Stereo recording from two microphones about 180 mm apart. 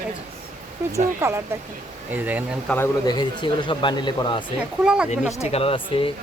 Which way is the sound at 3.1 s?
25° left (ahead or behind).